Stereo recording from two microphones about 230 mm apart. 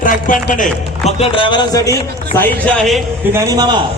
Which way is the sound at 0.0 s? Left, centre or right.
Left.